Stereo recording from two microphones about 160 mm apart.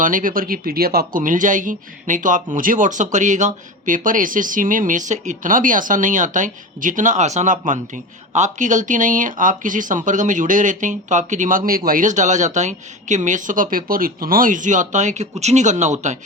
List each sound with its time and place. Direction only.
0.0 s speech: 55° right (ahead or behind)